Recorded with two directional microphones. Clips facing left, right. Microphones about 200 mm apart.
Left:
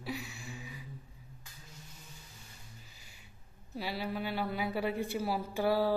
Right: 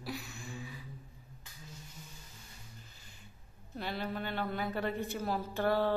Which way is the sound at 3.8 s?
5° left (ahead or behind).